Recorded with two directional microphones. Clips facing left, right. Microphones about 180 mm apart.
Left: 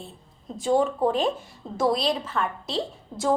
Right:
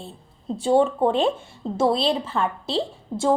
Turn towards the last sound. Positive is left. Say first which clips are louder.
# right 4 dB
turn(degrees=-30)  # may be behind; listen again after turning